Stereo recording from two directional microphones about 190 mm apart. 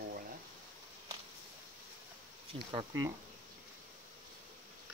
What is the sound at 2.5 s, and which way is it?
Speech, 20° right (ahead or behind).